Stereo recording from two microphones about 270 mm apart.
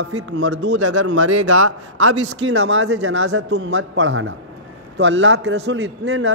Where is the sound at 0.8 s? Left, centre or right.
Right.